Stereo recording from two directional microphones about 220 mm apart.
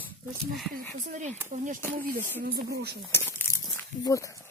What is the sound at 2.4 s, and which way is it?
Speech, 40° right (ahead or behind).